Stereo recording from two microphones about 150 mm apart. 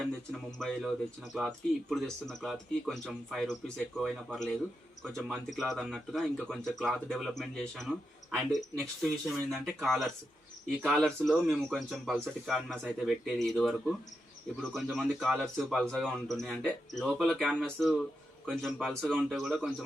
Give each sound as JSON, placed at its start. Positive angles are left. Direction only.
{"t": 0.0, "sound": "speech", "side_deg": 0}